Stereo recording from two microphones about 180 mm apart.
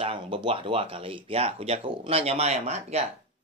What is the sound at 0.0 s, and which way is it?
Speech, 30° right (ahead or behind).